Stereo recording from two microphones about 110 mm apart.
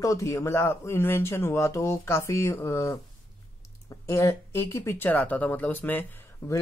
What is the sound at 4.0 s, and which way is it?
Speech, 25° left (ahead or behind).